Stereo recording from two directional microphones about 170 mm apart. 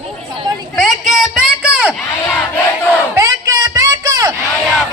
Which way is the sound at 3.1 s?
20° right (ahead or behind).